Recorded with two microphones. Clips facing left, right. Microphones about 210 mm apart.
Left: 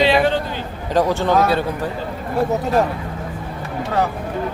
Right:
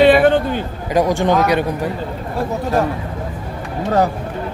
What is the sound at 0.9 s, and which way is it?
Speech, 15° right (ahead or behind).